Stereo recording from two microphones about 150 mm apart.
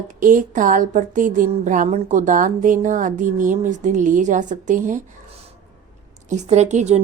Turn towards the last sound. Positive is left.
turn(degrees=-50)  # may be behind; listen again after turning